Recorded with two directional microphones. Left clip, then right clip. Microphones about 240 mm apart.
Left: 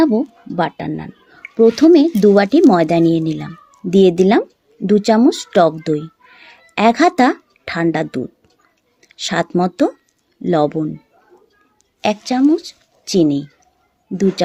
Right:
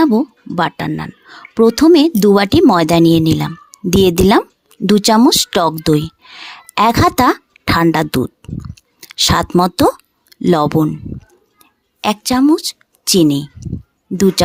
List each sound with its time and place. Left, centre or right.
0.5 s speech: right
11.9 s speech: right